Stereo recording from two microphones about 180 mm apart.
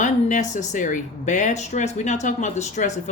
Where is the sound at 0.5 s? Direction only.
45° left (ahead or behind).